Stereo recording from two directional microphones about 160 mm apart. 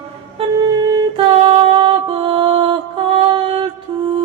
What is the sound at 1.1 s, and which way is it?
Music, 35° right (ahead or behind).